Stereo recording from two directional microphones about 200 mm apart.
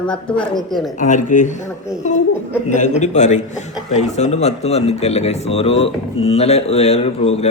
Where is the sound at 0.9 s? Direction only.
40° left (ahead or behind).